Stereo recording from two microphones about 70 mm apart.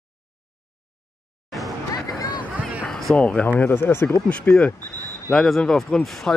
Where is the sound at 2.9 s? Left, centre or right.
Centre.